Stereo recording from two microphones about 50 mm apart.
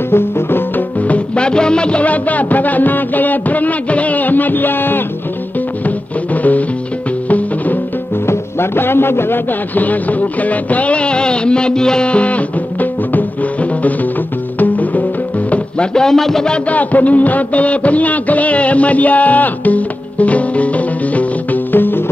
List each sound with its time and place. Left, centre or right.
0.1 s music: left
0.9 s speech: left
5.9 s music: left
8.3 s a man's voice: left
14.6 s music: left
15.9 s a man's voice: centre
16.4 s a sound: left
21.7 s music: left